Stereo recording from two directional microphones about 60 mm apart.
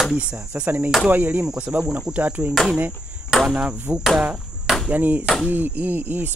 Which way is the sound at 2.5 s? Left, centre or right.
Centre.